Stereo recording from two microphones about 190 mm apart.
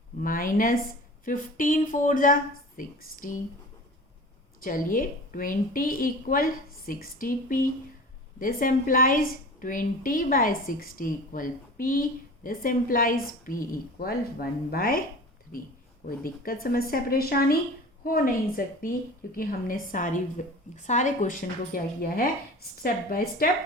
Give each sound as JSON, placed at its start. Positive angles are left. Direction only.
{"t": 0.2, "sound": "a woman's voice", "side_deg": 45}
{"t": 4.6, "sound": "a woman's voice", "side_deg": 45}
{"t": 16.0, "sound": "a woman's voice", "side_deg": 50}